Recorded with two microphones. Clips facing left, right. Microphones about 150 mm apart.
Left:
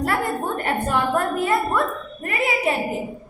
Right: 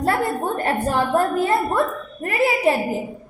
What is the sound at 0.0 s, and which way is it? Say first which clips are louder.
A woman's voice: right 2 dB; 30° right (ahead or behind).